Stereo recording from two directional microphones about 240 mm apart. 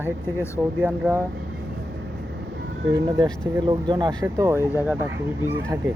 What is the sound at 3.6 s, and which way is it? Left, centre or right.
Speech, centre.